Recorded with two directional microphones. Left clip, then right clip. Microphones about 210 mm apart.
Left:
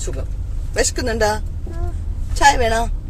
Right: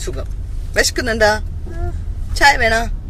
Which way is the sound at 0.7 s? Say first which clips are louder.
Right 4 dB; 20° right (ahead or behind).